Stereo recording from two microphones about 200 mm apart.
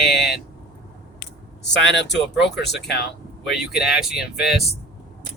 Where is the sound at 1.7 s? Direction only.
65° left (ahead or behind).